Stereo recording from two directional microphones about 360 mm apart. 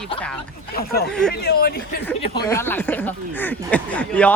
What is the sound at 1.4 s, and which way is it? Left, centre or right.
Speech, left.